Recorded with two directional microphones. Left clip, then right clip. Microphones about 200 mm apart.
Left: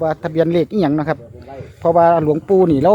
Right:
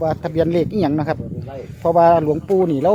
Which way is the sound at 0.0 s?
15° left (ahead or behind).